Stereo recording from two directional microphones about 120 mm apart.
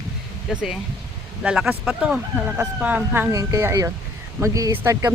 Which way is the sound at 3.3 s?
25° right (ahead or behind).